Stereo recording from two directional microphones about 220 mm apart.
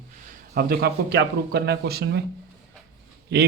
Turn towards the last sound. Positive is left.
turn(degrees=-50)  # may be behind; listen again after turning